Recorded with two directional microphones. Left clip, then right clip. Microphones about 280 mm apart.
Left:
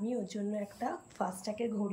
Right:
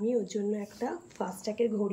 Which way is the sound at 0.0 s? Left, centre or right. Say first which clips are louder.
Right 7 dB; centre.